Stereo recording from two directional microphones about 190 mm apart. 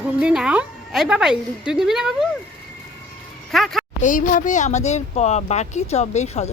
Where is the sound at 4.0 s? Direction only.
40° left (ahead or behind).